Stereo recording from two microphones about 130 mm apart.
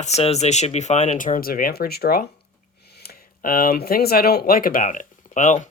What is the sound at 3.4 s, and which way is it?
Speech, 90° left.